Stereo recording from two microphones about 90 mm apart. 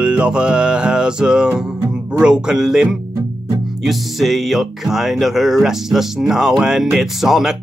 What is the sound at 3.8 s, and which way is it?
Speech, centre (ahead or behind).